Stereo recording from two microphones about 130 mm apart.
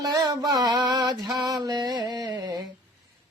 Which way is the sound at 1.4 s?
30° right (ahead or behind).